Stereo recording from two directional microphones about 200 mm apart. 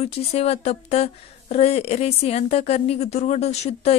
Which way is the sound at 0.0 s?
30° left (ahead or behind).